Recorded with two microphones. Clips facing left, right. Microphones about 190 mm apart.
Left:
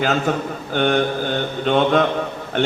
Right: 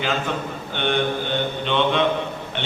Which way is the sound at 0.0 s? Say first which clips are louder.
Left 5 dB; 45° left (ahead or behind).